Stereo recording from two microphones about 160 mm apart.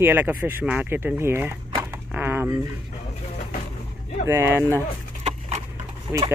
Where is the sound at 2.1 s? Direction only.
10° right (ahead or behind).